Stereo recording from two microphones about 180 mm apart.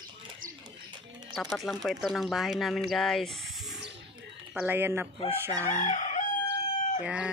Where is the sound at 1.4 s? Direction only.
Centre (ahead or behind).